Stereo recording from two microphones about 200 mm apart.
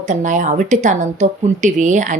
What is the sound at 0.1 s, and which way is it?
Speech, 40° right (ahead or behind).